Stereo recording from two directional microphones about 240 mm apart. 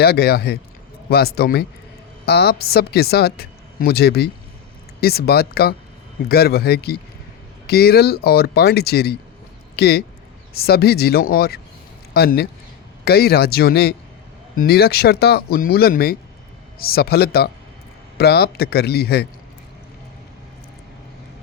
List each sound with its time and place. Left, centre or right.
0.0 s speech: left